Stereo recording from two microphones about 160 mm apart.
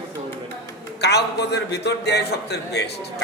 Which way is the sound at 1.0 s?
90° left.